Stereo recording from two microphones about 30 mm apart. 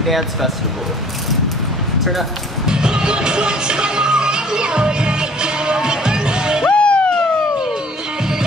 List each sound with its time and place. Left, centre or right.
0.0 s speech: centre
2.6 s music: right
6.7 s music: left